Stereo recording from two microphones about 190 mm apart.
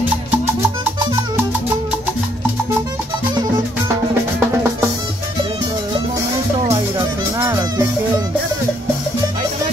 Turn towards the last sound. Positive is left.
turn(degrees=-15)  # may be behind; listen again after turning